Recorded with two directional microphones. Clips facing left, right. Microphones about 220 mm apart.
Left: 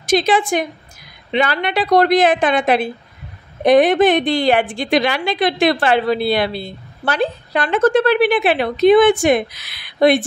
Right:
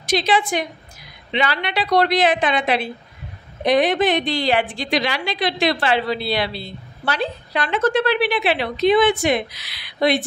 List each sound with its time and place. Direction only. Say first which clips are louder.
0.0 s a woman's voice: left 4 dB; 50° left (ahead or behind)